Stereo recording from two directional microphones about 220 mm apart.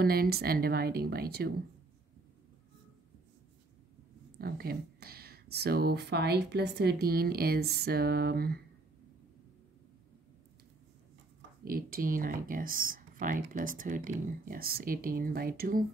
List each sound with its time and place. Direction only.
0.0 s speech: 45° right (ahead or behind)
4.4 s speech: 45° right (ahead or behind)
11.6 s speech: 40° right (ahead or behind)